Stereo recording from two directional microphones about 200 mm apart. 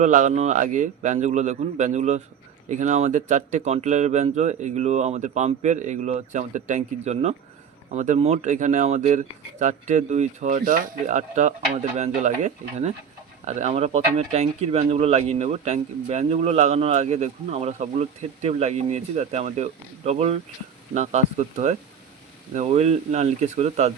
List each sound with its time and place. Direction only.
0.0 s speech: 35° right (ahead or behind)